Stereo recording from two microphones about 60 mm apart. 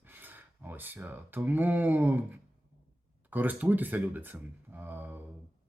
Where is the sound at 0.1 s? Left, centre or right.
Right.